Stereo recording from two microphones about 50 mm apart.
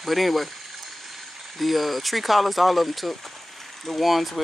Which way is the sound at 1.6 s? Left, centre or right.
Centre.